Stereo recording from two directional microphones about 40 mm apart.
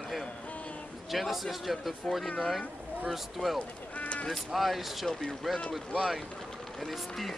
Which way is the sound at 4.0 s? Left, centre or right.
Left.